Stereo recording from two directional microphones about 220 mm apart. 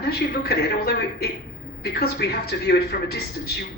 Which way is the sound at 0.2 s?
45° left (ahead or behind).